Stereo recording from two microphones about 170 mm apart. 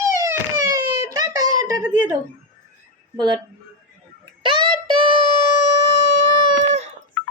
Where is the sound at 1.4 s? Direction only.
20° right (ahead or behind).